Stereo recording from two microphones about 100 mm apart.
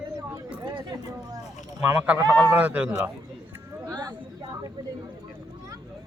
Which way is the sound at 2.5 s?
15° right (ahead or behind).